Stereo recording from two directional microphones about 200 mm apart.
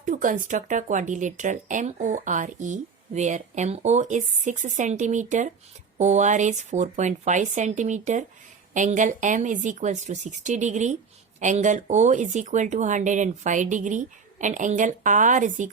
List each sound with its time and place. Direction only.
0.0 s speech: 40° right (ahead or behind)